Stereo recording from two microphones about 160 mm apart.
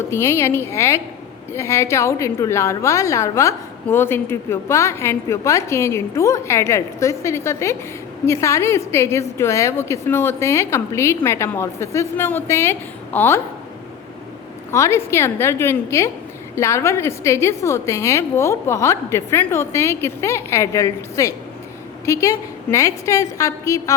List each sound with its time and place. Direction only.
0.1 s a woman's voice: 15° left (ahead or behind)
14.7 s a woman's voice: 15° left (ahead or behind)